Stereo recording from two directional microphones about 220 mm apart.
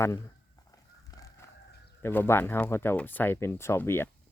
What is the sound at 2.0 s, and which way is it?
Speech, 10° left (ahead or behind).